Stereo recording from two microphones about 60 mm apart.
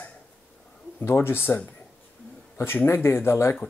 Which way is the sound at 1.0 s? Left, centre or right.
Left.